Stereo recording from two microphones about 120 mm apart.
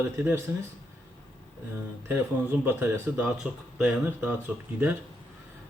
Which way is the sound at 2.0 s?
20° right (ahead or behind).